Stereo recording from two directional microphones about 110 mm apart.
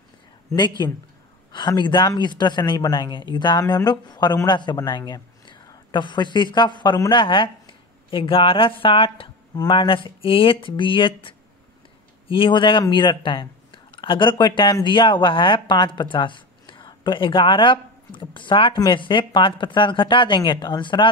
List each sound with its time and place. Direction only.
0.6 s speech: 40° left (ahead or behind)